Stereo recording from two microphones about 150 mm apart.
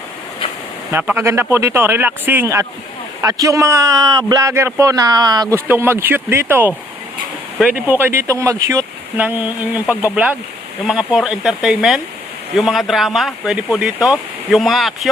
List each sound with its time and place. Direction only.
1.0 s a man's voice: 15° right (ahead or behind)
5.5 s speech: 15° right (ahead or behind)